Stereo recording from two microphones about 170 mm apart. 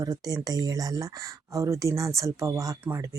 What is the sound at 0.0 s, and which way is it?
Speech, 20° right (ahead or behind).